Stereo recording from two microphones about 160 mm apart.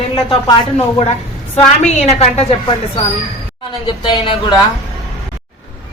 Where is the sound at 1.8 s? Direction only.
40° left (ahead or behind).